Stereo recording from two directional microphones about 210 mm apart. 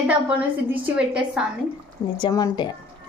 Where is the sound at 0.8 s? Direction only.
5° right (ahead or behind).